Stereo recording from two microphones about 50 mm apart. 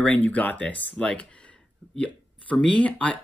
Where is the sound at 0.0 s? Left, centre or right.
Left.